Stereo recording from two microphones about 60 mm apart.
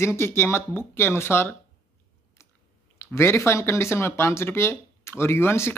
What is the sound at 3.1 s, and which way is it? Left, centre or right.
Speech, left.